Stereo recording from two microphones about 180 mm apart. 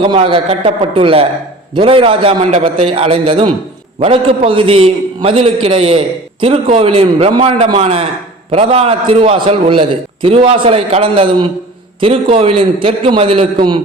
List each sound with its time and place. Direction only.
0.0 s a man's voice: 30° right (ahead or behind)